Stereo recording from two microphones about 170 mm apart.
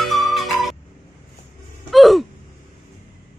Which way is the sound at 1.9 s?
Centre (ahead or behind).